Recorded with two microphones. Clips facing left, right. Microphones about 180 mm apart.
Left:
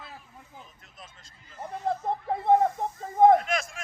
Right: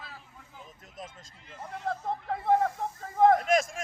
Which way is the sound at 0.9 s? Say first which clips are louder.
Right 7 dB; 45° right (ahead or behind).